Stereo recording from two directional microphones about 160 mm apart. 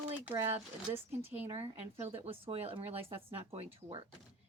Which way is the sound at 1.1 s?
40° right (ahead or behind).